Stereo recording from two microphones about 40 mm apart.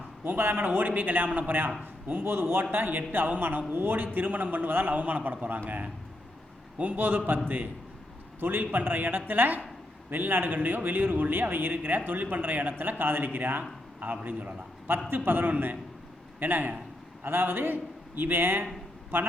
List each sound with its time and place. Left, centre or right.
0.3 s speech: right
0.6 s a man's voice: right
6.7 s a man's voice: right
15.1 s a man's voice: right
17.2 s a man's voice: right